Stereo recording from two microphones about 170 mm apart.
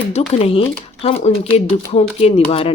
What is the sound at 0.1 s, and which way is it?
Speech, 40° left (ahead or behind).